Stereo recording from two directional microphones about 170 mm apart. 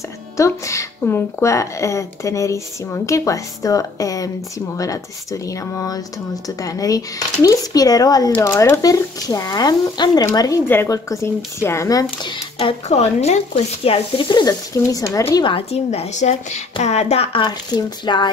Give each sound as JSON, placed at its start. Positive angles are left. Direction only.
{"t": 0.4, "sound": "a woman's voice", "side_deg": 20}
{"t": 15.5, "sound": "a woman's voice", "side_deg": 40}